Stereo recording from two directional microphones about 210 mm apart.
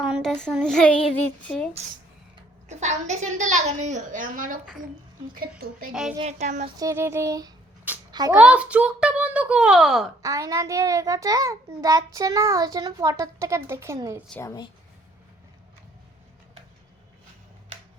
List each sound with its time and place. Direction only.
0.0 s child singing: centre (ahead or behind)
1.4 s a child's voice: 5° left (ahead or behind)
2.6 s a woman's voice: 35° right (ahead or behind)
5.9 s a child's voice: 5° right (ahead or behind)
6.1 s a woman's voice: 35° right (ahead or behind)
6.7 s a child's voice: 15° right (ahead or behind)
10.2 s a child's voice: 15° right (ahead or behind)
14.3 s a woman's voice: 10° left (ahead or behind)